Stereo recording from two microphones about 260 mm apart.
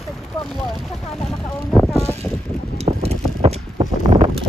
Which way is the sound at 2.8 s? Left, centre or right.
Right.